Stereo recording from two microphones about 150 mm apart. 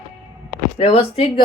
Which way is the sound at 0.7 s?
40° left (ahead or behind).